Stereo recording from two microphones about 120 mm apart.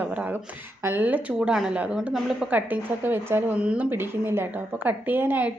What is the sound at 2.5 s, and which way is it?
A woman's voice, 15° right (ahead or behind).